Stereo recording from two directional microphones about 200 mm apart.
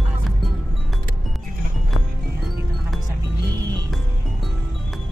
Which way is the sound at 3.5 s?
20° right (ahead or behind).